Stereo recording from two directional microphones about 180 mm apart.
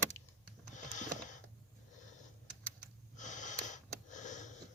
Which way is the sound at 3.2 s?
45° left (ahead or behind).